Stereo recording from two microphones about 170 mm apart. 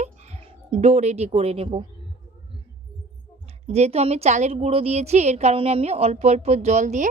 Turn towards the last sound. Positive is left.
turn(degrees=-45)  # may be behind; listen again after turning